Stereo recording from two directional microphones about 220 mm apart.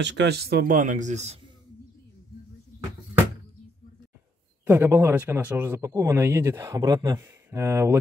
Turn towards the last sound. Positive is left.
turn(degrees=-10)  # may be behind; listen again after turning